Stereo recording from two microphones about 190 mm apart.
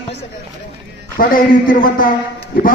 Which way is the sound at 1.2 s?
50° left (ahead or behind).